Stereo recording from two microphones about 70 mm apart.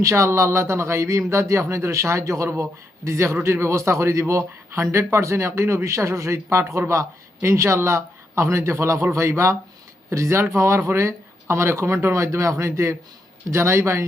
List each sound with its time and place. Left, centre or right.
0.0 s speech: right